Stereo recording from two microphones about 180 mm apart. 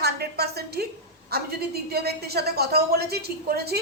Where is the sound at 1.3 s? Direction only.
60° right (ahead or behind).